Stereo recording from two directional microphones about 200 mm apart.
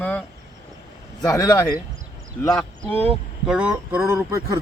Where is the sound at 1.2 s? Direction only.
20° left (ahead or behind).